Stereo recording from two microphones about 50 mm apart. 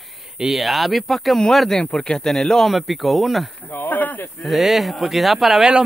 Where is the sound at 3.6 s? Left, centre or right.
Left.